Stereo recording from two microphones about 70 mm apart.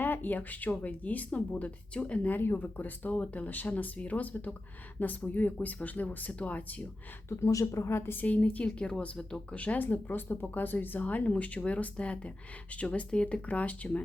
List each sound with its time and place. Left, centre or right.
0.0 s speech: left
7.3 s speech: left
8.2 s speech: left